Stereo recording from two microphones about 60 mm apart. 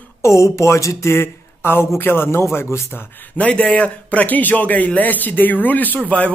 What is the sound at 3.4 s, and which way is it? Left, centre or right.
Speech, left.